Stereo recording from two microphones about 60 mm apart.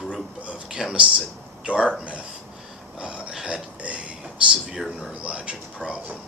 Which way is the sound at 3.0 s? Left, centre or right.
Centre.